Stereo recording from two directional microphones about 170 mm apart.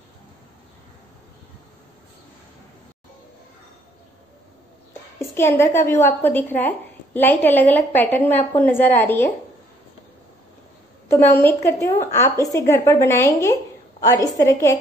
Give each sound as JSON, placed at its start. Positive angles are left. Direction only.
{"t": 5.2, "sound": "a woman's voice", "side_deg": 15}
{"t": 11.1, "sound": "a woman's voice", "side_deg": 10}